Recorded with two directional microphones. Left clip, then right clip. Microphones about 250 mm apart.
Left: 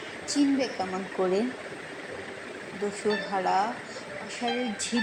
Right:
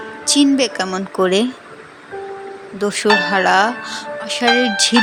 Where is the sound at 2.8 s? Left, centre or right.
Right.